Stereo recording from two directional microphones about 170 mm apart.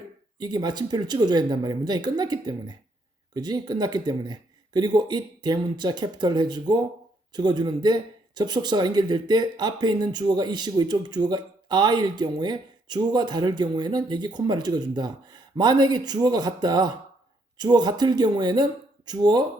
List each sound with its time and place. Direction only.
0.3 s speech: 25° right (ahead or behind)